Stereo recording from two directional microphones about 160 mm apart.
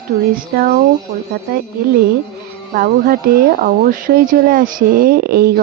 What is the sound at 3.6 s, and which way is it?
Speech, 65° right (ahead or behind).